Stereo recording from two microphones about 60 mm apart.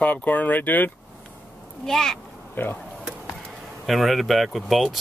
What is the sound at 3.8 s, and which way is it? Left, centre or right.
Speech, centre.